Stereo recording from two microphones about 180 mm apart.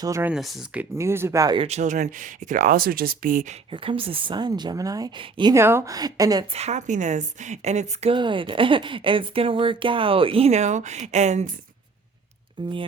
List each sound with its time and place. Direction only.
0.0 s speech: 15° right (ahead or behind)
1.6 s speech: 40° right (ahead or behind)
3.7 s a woman's voice: 30° right (ahead or behind)
6.5 s a woman's voice: 35° right (ahead or behind)
12.6 s a woman's voice: 25° right (ahead or behind)